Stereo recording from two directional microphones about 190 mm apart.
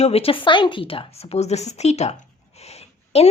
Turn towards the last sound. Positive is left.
turn(degrees=35)  # may be behind; listen again after turning